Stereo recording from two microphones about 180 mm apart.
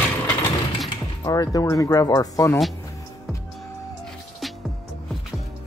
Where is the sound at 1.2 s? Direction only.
20° left (ahead or behind).